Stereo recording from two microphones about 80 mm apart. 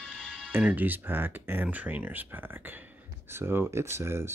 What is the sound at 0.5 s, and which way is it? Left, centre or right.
Speech, right.